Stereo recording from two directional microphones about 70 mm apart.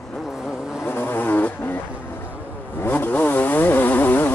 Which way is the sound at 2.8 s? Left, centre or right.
Left.